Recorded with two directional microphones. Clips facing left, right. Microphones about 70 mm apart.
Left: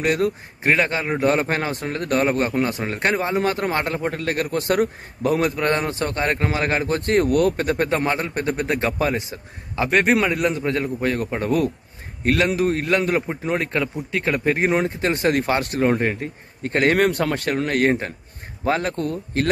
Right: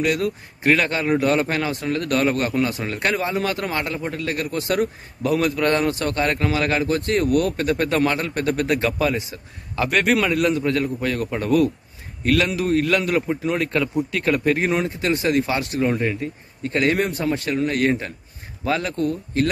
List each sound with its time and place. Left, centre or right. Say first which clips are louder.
0.0 s a man's voice: left 1 dB; left
0.7 s a man's voice: right 1 dB; left
5.6 s speech: right 2 dB; left
7.0 s speech: left 2 dB; left
7.5 s a man's voice: right 1 dB; left